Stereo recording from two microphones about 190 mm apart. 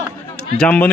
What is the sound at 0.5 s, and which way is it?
Speech, 5° left (ahead or behind).